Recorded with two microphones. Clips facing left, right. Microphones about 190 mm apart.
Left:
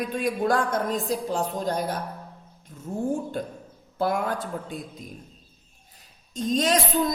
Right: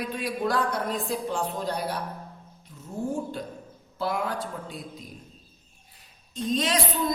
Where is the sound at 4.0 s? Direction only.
50° left (ahead or behind).